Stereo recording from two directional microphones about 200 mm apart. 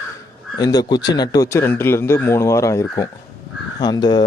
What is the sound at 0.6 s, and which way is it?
A man's voice, 20° left (ahead or behind).